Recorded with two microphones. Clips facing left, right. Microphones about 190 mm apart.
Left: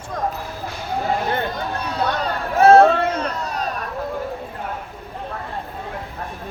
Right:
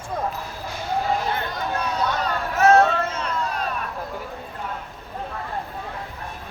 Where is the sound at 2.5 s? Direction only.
30° left (ahead or behind).